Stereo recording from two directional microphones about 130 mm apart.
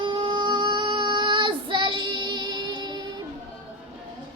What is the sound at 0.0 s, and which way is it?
Child singing, 40° right (ahead or behind).